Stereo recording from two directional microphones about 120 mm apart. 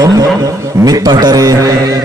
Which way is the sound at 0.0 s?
25° right (ahead or behind).